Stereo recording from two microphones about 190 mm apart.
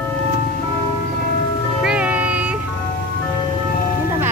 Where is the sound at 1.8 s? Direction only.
5° right (ahead or behind).